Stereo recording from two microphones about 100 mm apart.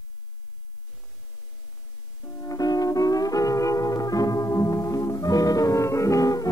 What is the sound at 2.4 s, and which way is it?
Music, 40° left (ahead or behind).